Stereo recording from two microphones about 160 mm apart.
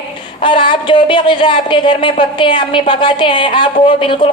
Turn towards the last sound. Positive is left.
turn(degrees=30)  # may be behind; listen again after turning